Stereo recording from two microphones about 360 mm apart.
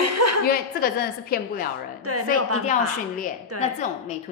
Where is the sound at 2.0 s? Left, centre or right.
Right.